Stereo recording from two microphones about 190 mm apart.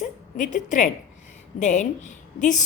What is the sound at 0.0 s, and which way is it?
A woman's voice, 40° left (ahead or behind).